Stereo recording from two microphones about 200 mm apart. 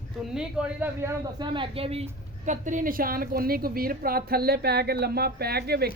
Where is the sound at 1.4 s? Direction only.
25° right (ahead or behind); by 5.9 s 50° right (ahead or behind).